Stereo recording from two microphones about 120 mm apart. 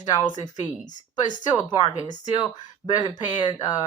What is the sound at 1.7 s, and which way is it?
Speech, 40° left (ahead or behind).